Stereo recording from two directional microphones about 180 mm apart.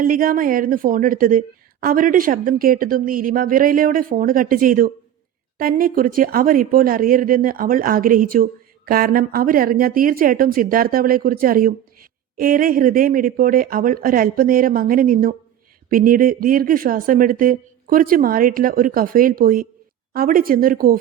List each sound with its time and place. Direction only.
0.0 s a woman's voice: 50° right (ahead or behind)